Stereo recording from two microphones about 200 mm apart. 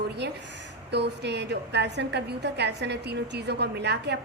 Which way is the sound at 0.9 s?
60° right (ahead or behind).